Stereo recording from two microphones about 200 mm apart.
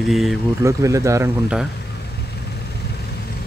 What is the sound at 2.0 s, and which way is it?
Vehicle, 55° left (ahead or behind).